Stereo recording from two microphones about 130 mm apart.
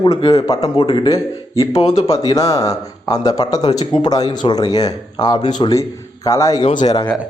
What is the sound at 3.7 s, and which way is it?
Speech, 55° left (ahead or behind).